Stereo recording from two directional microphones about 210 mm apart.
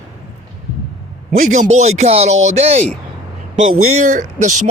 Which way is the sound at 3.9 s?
35° right (ahead or behind).